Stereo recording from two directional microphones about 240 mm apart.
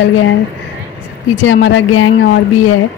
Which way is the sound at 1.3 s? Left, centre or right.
Left.